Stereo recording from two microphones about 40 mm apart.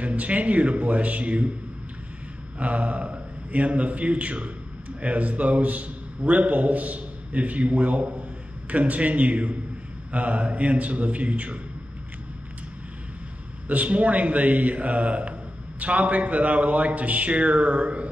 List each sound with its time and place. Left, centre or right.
0.0 s speech: right
2.6 s a man's voice: right
13.7 s speech: right